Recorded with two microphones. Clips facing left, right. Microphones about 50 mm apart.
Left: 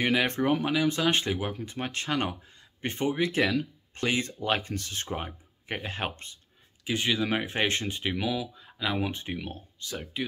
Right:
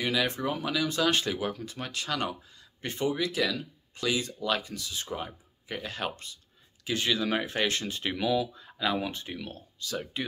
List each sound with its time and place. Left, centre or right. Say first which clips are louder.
0.0 s speech: left 3 dB; left
0.7 s speech: left 2 dB; left
6.8 s speech: left 1 dB; left
8.0 s speech: right 6 dB; centre; by 9.9 s left
10.1 s speech: left 2 dB; centre